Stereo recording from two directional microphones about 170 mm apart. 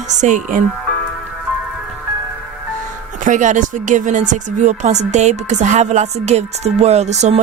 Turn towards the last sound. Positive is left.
turn(degrees=-40)  # may be behind; listen again after turning